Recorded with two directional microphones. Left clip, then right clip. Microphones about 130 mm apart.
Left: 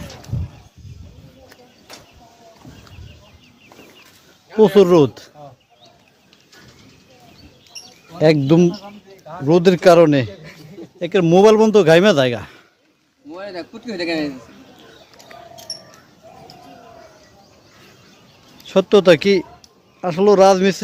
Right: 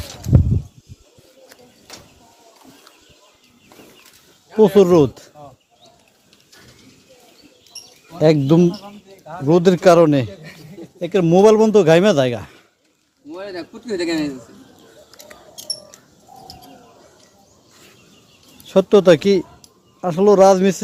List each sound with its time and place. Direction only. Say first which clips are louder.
4.5 s speech: left 1 dB; centre (ahead or behind)
8.4 s speech: left 1 dB; centre (ahead or behind)
8.7 s a sound: left 1 dB; 85° right
9.5 s speech: left 1 dB; centre (ahead or behind)
13.3 s speech: even; 20° left (ahead or behind)
18.6 s speech: even; 15° right (ahead or behind)